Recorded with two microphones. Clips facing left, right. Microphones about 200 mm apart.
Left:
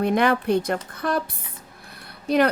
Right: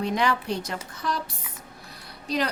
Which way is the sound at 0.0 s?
55° left (ahead or behind).